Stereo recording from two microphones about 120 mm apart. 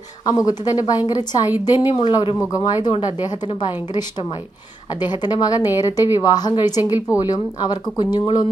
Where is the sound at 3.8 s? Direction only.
35° left (ahead or behind).